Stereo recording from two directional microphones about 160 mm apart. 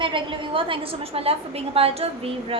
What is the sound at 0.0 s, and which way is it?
A woman's voice, 30° right (ahead or behind).